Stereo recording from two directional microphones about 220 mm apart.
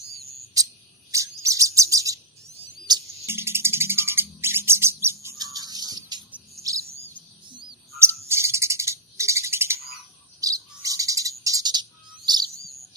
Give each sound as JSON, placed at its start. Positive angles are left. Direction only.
{"t": 1.1, "sound": "chirp", "side_deg": -15}
{"t": 2.8, "sound": "music", "side_deg": -15}
{"t": 6.3, "sound": "bird", "side_deg": -15}